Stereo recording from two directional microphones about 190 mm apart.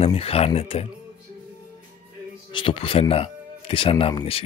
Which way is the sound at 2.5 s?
30° left (ahead or behind).